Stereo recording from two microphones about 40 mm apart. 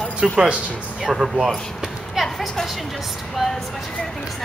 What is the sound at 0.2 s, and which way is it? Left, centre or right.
Speech, centre.